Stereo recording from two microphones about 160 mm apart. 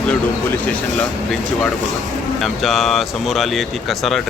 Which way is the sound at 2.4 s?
Centre (ahead or behind).